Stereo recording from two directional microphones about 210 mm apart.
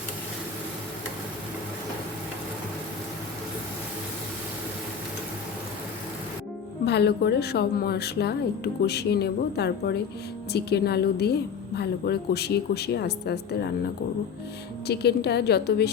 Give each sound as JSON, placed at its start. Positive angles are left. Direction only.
{"t": 6.8, "sound": "a woman's voice", "side_deg": 50}
{"t": 14.8, "sound": "a woman's voice", "side_deg": 50}